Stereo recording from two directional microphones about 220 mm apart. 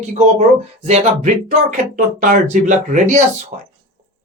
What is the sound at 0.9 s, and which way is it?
Speech, 30° right (ahead or behind).